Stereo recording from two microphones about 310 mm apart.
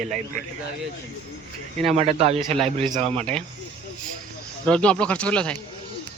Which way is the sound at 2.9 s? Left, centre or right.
Centre.